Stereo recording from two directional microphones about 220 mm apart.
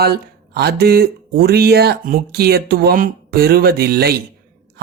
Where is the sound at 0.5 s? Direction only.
45° right (ahead or behind).